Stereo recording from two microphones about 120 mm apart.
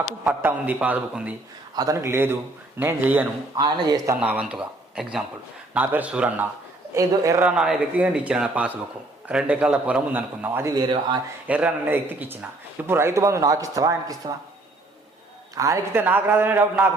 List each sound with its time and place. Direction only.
0.3 s a man's voice: 15° right (ahead or behind)
1.7 s a man's voice: 30° right (ahead or behind)
3.5 s speech: 35° right (ahead or behind)
4.2 s a man's voice: 10° right (ahead or behind)
6.9 s a man's voice: 30° right (ahead or behind)
7.4 s a man's voice: 5° right (ahead or behind)
10.8 s speech: 40° right (ahead or behind)
11.4 s a man's voice: 10° right (ahead or behind); by 14.3 s 30° right (ahead or behind)
15.5 s a man's voice: 25° right (ahead or behind)